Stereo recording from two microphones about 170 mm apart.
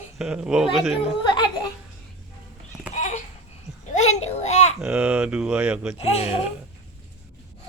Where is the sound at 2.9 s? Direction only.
45° left (ahead or behind).